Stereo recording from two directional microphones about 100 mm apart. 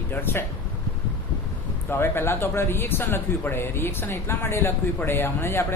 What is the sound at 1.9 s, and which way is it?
Speech, 20° left (ahead or behind).